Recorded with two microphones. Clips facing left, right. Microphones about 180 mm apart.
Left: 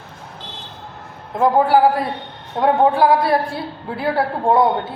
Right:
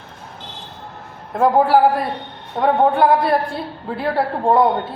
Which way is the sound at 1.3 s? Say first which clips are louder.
Right 1 dB; centre (ahead or behind).